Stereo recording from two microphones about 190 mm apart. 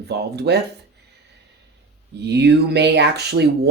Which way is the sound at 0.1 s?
60° right (ahead or behind).